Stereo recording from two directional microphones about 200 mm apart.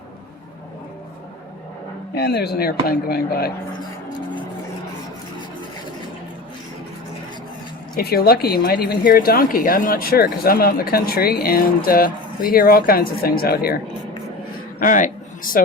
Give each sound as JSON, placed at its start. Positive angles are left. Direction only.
{"t": 2.1, "sound": "a woman's voice", "side_deg": 55}
{"t": 7.9, "sound": "a woman's voice", "side_deg": 50}
{"t": 14.8, "sound": "a man's voice", "side_deg": 40}
{"t": 15.5, "sound": "a sound", "side_deg": 45}